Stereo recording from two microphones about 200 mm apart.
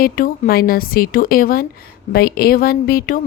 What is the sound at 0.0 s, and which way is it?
A woman's voice, 45° left (ahead or behind).